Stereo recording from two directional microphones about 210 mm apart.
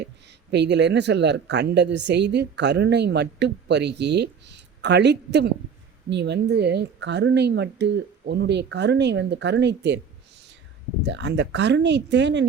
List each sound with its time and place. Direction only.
0.0 s speech: 55° right (ahead or behind)
11.0 s speech: 55° right (ahead or behind)